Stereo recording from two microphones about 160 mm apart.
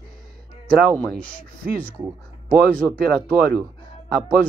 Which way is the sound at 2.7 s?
10° left (ahead or behind).